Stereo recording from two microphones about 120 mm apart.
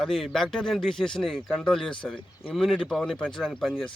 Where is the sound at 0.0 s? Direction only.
Centre (ahead or behind).